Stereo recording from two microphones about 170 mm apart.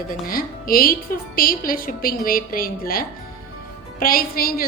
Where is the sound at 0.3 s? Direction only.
60° left (ahead or behind).